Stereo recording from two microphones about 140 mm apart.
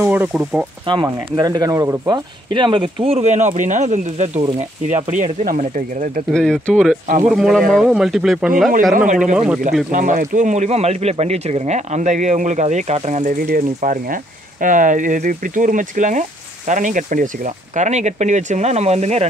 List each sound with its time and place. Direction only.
0.0 s speech: 15° right (ahead or behind)
0.9 s speech: 35° right (ahead or behind); by 6.2 s 65° right (ahead or behind)
6.3 s speech: 5° left (ahead or behind)
8.9 s speech: 65° right (ahead or behind)